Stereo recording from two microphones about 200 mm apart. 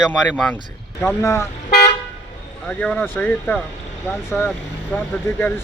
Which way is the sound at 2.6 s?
5° left (ahead or behind).